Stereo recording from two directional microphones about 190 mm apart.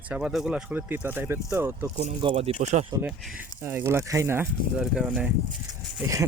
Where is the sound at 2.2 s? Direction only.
30° right (ahead or behind).